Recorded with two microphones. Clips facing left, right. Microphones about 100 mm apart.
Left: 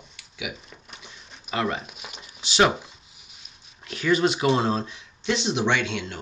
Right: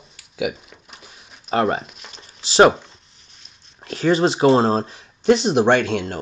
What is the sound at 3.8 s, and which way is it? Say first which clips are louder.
Speech: right 4 dB; 35° right (ahead or behind).